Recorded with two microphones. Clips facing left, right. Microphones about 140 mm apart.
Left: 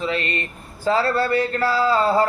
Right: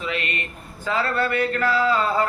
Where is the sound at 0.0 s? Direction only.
35° left (ahead or behind).